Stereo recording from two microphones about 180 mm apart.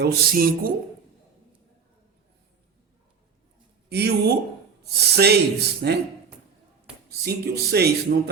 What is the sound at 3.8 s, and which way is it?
Speech, 65° right (ahead or behind).